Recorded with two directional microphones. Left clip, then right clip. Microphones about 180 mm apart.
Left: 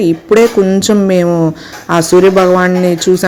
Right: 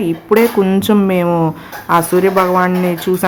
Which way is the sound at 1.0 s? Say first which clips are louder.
Left 4 dB; 15° left (ahead or behind).